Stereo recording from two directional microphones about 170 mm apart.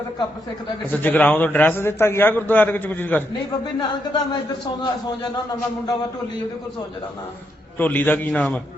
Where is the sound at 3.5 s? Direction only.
25° left (ahead or behind).